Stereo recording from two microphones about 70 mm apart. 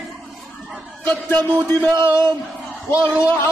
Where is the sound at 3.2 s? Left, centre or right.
Left.